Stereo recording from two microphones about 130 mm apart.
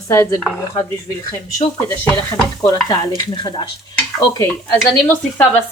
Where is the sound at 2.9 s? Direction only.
35° left (ahead or behind).